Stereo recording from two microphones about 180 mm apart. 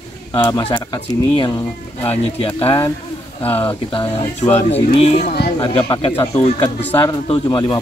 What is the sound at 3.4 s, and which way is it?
Speech, 10° left (ahead or behind).